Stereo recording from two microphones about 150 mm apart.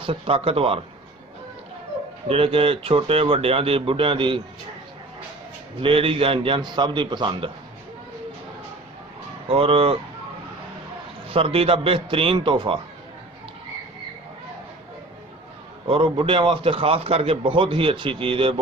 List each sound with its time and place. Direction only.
0.0 s a man's voice: 35° right (ahead or behind)
2.3 s a man's voice: 40° right (ahead or behind)
5.8 s a man's voice: 35° right (ahead or behind)
9.5 s a man's voice: 40° right (ahead or behind)
11.3 s a man's voice: 40° right (ahead or behind)
15.9 s a man's voice: 35° right (ahead or behind)